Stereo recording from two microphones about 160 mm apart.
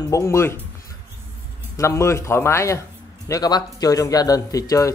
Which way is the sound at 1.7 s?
20° left (ahead or behind).